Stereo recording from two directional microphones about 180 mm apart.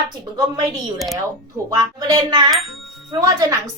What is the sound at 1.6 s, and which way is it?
Speech, 20° right (ahead or behind).